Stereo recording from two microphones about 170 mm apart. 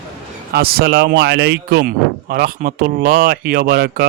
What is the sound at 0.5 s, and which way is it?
Speech, 65° right (ahead or behind).